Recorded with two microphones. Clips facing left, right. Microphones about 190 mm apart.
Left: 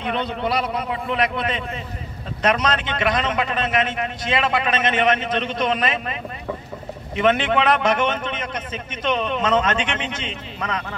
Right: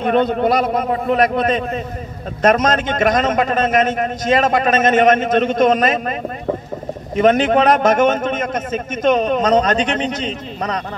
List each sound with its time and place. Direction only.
0.0 s a man's voice: 45° right (ahead or behind)